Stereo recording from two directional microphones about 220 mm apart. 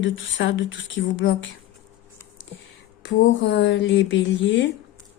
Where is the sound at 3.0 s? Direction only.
60° left (ahead or behind).